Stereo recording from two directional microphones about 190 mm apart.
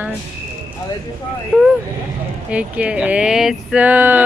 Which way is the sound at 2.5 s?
5° right (ahead or behind).